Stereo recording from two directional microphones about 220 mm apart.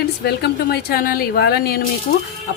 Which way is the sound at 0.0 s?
45° left (ahead or behind).